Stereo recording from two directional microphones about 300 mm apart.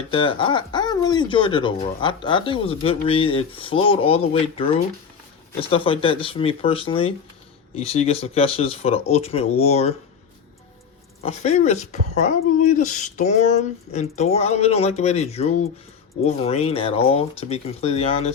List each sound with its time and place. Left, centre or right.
0.1 s speech: centre
11.2 s speech: left